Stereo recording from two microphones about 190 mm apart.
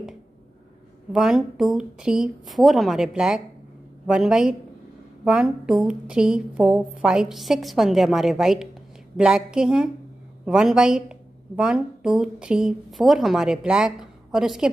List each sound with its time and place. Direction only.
1.1 s a woman's voice: centre (ahead or behind)